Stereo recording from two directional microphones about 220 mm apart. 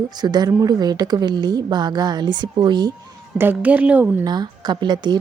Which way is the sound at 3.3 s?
10° right (ahead or behind).